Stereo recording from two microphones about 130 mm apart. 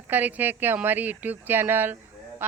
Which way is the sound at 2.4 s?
15° right (ahead or behind).